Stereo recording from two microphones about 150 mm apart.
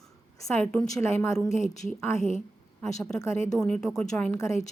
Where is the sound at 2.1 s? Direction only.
50° left (ahead or behind).